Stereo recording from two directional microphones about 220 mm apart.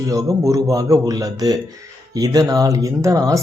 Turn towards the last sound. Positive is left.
turn(degrees=-15)  # may be behind; listen again after turning